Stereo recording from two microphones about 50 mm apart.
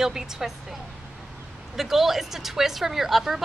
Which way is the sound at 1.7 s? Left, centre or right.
Centre.